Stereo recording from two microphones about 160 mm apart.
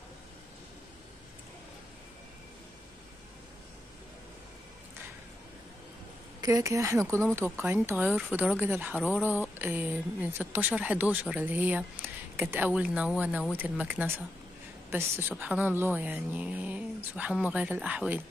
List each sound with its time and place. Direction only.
6.4 s a woman's voice: 20° right (ahead or behind)